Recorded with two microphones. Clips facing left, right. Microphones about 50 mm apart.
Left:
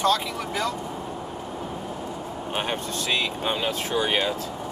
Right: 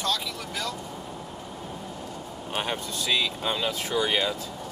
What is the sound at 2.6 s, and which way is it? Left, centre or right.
Speech, left.